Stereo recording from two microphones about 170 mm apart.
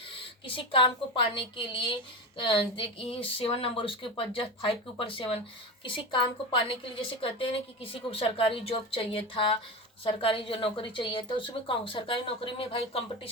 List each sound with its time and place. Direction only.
0.4 s a woman's voice: 30° left (ahead or behind)